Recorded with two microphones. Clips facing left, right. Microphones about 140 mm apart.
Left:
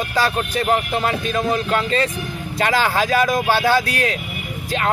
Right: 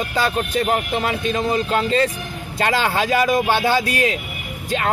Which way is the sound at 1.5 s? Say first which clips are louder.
Right 1 dB; 30° right (ahead or behind).